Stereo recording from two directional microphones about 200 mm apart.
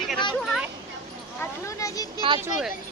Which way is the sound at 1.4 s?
15° left (ahead or behind).